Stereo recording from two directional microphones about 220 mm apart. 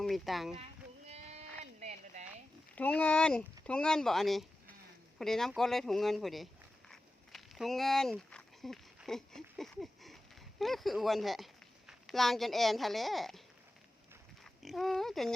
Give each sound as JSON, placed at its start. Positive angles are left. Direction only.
{"t": 0.0, "sound": "speech", "side_deg": 0}
{"t": 1.0, "sound": "a sound", "side_deg": -30}
{"t": 2.7, "sound": "speech", "side_deg": 5}
{"t": 5.2, "sound": "a sound", "side_deg": 0}
{"t": 10.6, "sound": "speech", "side_deg": 0}
{"t": 14.4, "sound": "speech", "side_deg": 0}